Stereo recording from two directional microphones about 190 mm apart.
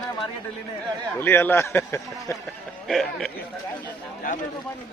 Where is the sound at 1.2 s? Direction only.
10° left (ahead or behind).